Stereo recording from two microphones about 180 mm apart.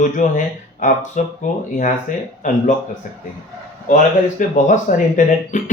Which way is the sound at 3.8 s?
45° left (ahead or behind).